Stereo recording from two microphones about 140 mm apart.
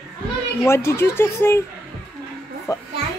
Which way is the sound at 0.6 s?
20° left (ahead or behind).